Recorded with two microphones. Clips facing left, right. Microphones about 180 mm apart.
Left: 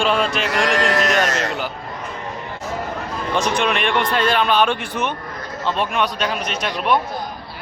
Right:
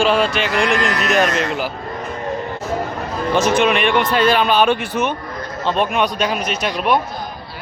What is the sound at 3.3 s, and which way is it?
Speech, 5° right (ahead or behind).